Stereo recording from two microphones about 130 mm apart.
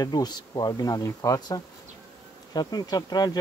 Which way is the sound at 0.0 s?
30° left (ahead or behind).